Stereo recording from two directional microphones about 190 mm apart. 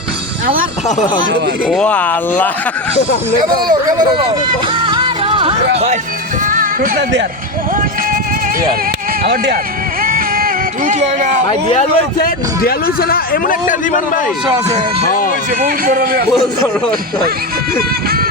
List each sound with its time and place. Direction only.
1.6 s speech: centre (ahead or behind)
3.7 s speech: 20° right (ahead or behind)
4.7 s music: 25° right (ahead or behind)
5.7 s speech: 35° right (ahead or behind)
6.4 s music: 45° right (ahead or behind)
9.2 s speech: 55° right (ahead or behind)
10.0 s a sound: 50° right (ahead or behind)
11.4 s speech: 35° left (ahead or behind)
12.2 s a man's voice: 50° left (ahead or behind)
15.9 s a man's voice: 50° right (ahead or behind)
17.7 s music: 50° right (ahead or behind)